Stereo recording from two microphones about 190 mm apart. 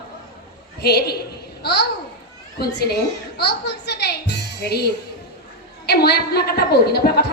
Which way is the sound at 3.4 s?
60° left (ahead or behind).